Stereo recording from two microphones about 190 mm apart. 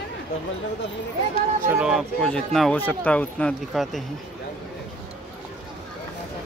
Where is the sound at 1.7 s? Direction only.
5° right (ahead or behind).